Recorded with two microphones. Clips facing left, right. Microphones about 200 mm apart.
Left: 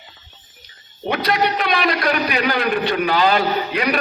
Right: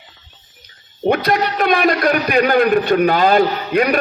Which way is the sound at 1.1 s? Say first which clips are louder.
Right 1 dB; 50° right (ahead or behind).